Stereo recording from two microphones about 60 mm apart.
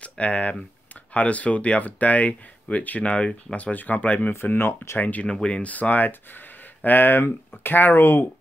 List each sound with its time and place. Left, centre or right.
0.0 s speech: left
4.3 s speech: left
4.9 s speech: left
5.3 s speech: centre; by 8.3 s left